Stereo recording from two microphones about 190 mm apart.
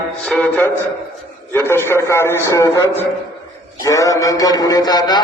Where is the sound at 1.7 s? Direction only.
15° left (ahead or behind).